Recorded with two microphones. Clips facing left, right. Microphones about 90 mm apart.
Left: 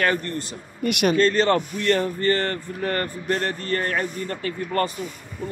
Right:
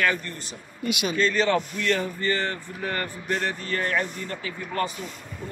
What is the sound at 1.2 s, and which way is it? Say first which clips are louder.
Speech: right 1 dB; 40° left (ahead or behind).